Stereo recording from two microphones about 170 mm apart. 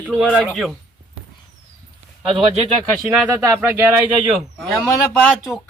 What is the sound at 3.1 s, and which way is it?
Speech, 5° right (ahead or behind).